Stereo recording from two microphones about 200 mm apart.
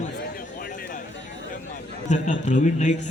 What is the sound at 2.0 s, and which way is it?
Speech, 35° left (ahead or behind).